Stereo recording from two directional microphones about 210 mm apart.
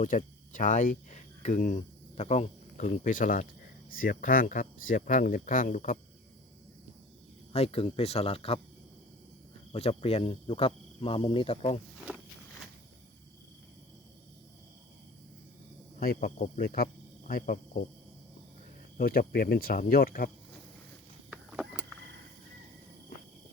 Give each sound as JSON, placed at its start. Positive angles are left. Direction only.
{"t": 0.0, "sound": "speech", "side_deg": 40}
{"t": 7.5, "sound": "speech", "side_deg": 30}
{"t": 9.7, "sound": "speech", "side_deg": 30}
{"t": 16.0, "sound": "speech", "side_deg": 45}
{"t": 18.9, "sound": "speech", "side_deg": 45}
{"t": 21.2, "sound": "vehicle", "side_deg": -5}